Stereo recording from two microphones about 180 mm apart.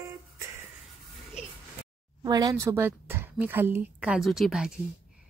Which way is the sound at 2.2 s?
20° right (ahead or behind).